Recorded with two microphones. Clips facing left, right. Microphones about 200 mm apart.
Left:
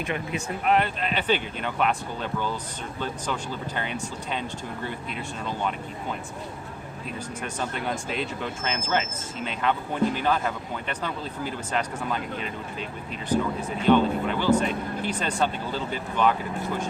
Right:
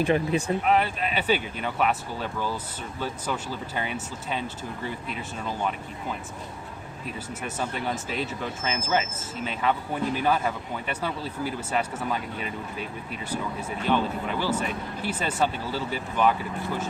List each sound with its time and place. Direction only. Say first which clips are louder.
0.0 s speech: right 7 dB; 35° right (ahead or behind)
0.6 s speech: even; centre (ahead or behind)
7.4 s speech: right 1 dB; 5° right (ahead or behind)
13.3 s speech: left 6 dB; 10° right (ahead or behind)